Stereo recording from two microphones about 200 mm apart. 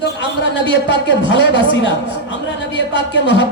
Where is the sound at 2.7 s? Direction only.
60° left (ahead or behind).